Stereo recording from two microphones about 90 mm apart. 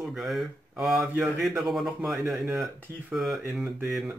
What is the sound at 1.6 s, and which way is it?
A man's voice, centre (ahead or behind).